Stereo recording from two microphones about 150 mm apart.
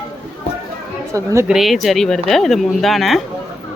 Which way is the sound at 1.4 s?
Centre (ahead or behind).